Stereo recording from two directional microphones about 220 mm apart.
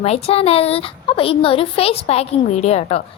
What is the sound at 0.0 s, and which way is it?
A woman's voice, 30° left (ahead or behind).